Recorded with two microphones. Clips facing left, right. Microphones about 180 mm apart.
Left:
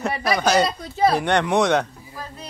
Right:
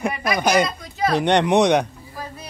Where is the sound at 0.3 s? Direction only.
15° right (ahead or behind).